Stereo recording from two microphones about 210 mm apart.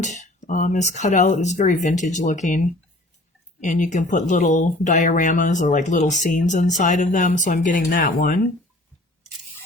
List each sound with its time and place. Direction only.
0.0 s speech: 35° left (ahead or behind)
3.6 s speech: 35° left (ahead or behind)